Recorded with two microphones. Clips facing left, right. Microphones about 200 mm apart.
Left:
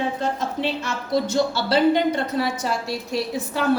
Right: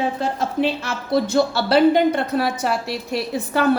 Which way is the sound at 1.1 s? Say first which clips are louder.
Right 3 dB; 55° right (ahead or behind).